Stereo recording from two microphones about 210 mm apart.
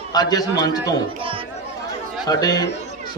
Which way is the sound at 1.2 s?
25° right (ahead or behind).